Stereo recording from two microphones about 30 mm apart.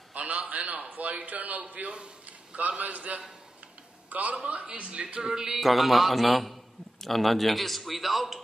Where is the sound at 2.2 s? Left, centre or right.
Right.